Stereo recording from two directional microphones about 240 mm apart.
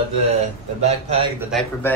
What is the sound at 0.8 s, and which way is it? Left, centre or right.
Speech, right.